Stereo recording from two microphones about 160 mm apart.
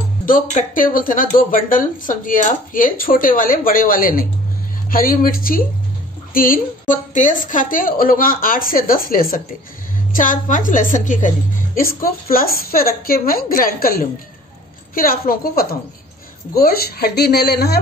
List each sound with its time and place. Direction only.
0.2 s speech: 55° left (ahead or behind); by 17.7 s 90° left